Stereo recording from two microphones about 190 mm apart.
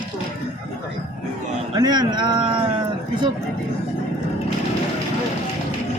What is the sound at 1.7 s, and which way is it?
Speech, 20° right (ahead or behind).